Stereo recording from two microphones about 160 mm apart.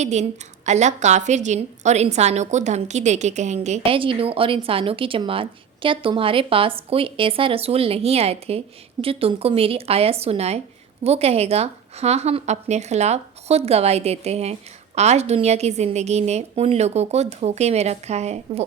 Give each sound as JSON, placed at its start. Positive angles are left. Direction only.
{"t": 0.0, "sound": "a woman's voice", "side_deg": -45}